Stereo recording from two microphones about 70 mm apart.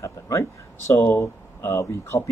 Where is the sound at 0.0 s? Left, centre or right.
Left.